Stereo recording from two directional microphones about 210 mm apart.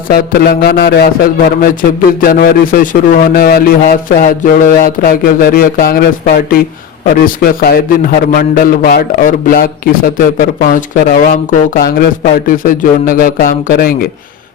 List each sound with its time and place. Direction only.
0.1 s a man's voice: 45° left (ahead or behind)